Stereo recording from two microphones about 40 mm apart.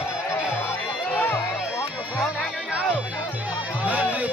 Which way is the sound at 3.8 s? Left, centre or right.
Right.